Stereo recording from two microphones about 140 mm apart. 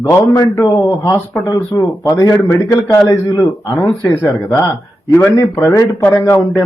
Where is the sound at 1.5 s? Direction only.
25° left (ahead or behind).